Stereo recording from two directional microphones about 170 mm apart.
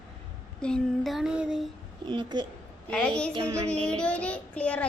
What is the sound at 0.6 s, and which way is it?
Female singing, 5° left (ahead or behind).